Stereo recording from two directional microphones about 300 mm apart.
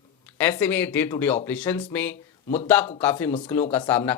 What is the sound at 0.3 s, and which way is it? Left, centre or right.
Speech, centre.